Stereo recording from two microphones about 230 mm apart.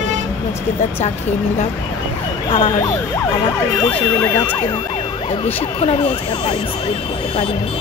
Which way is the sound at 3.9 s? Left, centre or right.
Centre.